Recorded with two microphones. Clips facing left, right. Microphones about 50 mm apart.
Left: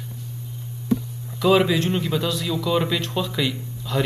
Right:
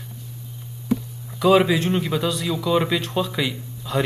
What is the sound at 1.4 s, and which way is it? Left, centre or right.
A man's voice, centre.